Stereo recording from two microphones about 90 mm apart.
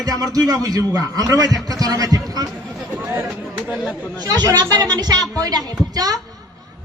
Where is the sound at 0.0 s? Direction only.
45° right (ahead or behind).